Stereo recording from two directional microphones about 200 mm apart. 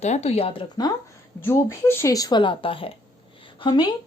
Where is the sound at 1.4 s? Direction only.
10° left (ahead or behind).